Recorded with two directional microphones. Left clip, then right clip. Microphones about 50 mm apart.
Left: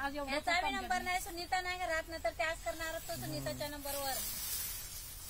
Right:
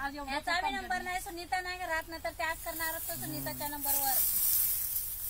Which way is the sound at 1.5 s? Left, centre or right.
Left.